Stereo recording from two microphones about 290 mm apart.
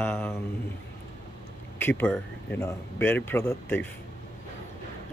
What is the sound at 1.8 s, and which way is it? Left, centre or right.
Speech, centre.